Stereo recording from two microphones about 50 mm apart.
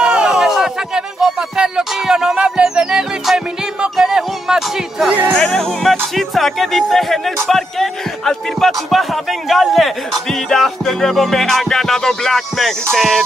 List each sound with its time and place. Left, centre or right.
0.0 s music: centre
5.4 s speech: centre
12.9 s music: centre